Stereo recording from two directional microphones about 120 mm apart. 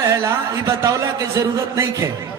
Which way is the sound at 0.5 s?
25° right (ahead or behind).